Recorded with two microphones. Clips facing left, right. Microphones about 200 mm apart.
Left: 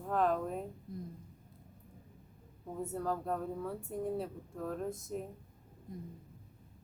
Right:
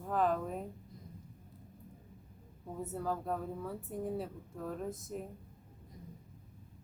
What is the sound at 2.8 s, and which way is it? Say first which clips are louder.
Speech: left 1 dB; centre (ahead or behind).